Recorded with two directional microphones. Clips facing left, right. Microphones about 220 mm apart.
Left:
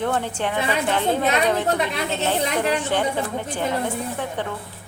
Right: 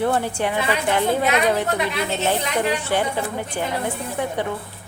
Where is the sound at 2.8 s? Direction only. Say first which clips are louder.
Even; 10° right (ahead or behind).